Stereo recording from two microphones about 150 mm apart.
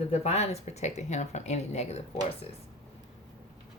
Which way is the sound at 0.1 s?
45° left (ahead or behind).